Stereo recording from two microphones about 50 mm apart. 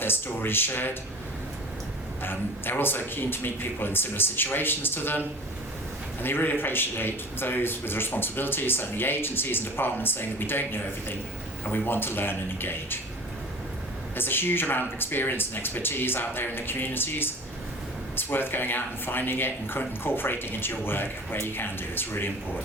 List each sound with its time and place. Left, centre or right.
0.0 s a man's voice: left
2.2 s a man's voice: left
6.2 s a man's voice: left
14.2 s a man's voice: left